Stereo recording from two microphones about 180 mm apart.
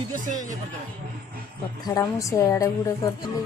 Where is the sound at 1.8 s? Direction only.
20° left (ahead or behind).